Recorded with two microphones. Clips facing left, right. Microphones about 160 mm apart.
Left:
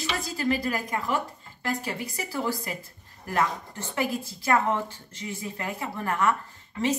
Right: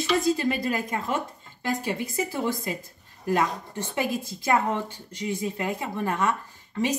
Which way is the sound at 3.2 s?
20° right (ahead or behind).